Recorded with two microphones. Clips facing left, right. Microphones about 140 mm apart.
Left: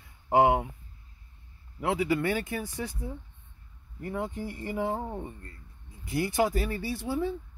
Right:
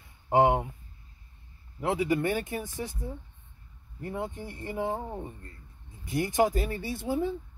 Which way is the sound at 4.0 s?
25° right (ahead or behind).